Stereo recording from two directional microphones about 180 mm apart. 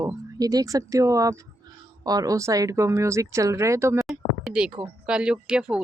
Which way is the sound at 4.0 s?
Centre (ahead or behind).